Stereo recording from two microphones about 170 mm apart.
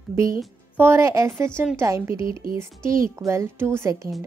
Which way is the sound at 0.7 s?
15° right (ahead or behind).